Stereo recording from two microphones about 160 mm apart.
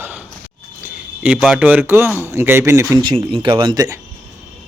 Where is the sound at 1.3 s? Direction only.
5° right (ahead or behind); by 4.0 s 20° right (ahead or behind).